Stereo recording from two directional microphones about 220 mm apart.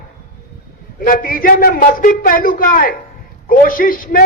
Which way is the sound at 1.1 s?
40° left (ahead or behind).